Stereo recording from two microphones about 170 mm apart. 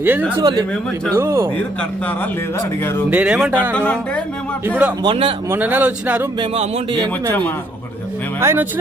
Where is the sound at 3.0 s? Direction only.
5° right (ahead or behind).